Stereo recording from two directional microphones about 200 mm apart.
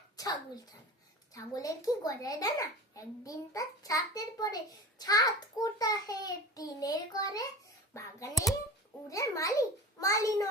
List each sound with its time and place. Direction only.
0.2 s a child's voice: 20° left (ahead or behind)
9.0 s a child's voice: 15° left (ahead or behind)